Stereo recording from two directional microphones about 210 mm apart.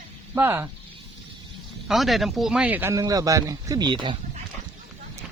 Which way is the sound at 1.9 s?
Centre (ahead or behind).